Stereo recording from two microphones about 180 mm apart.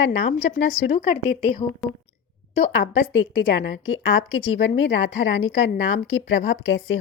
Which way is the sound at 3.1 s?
90° left.